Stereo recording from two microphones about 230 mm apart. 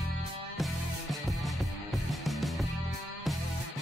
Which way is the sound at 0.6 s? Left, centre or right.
Centre.